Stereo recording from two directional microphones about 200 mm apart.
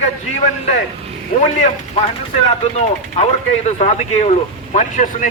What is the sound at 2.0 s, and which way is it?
A man's voice, 30° left (ahead or behind).